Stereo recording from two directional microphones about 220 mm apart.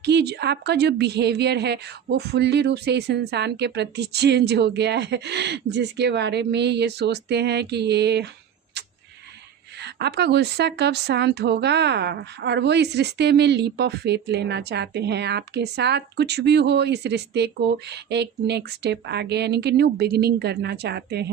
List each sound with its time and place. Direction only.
0.0 s a woman's voice: 50° right (ahead or behind)
8.8 s a sound: 50° right (ahead or behind)
9.7 s a woman's voice: 50° right (ahead or behind)